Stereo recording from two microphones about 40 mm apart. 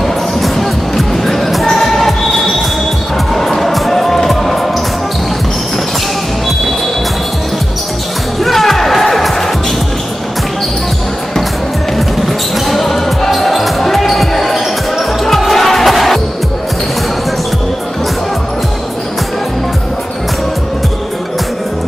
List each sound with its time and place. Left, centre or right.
0.0 s music: centre
8.5 s music: centre
12.6 s basketball bounce: centre